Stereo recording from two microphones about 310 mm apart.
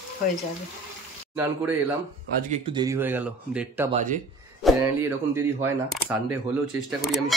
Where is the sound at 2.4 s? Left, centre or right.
Centre.